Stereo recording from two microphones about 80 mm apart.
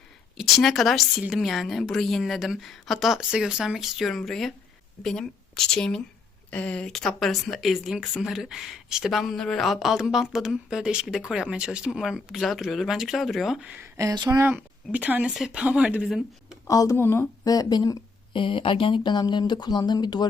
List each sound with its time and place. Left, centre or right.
0.3 s speech: centre
13.6 s speech: centre
13.8 s speech: right
14.1 s speech: right
14.5 s speech: centre
15.3 s speech: centre
15.6 s speech: centre
16.6 s speech: left
17.0 s speech: left
17.4 s speech: left
18.3 s speech: left